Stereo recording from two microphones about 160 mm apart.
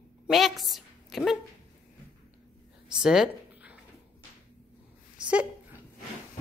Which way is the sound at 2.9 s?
5° right (ahead or behind).